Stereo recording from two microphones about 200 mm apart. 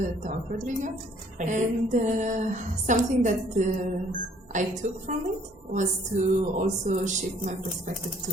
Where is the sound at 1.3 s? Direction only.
40° right (ahead or behind).